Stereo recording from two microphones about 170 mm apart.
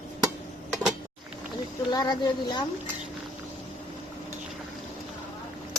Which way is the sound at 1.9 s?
25° left (ahead or behind).